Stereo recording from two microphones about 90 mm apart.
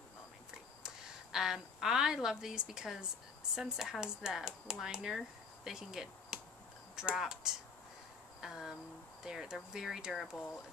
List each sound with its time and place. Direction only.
0.8 s a woman's voice: 5° right (ahead or behind)
8.4 s cricket: 5° right (ahead or behind)
9.2 s speech: 5° right (ahead or behind)